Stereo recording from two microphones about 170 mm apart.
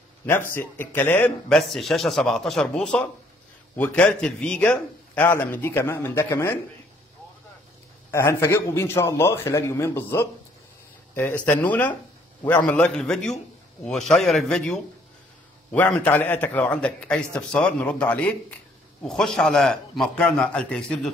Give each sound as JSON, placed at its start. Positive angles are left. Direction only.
{"t": 0.6, "sound": "a man's voice", "side_deg": 10}
{"t": 1.5, "sound": "a man's voice", "side_deg": 0}
{"t": 8.1, "sound": "a man's voice", "side_deg": 15}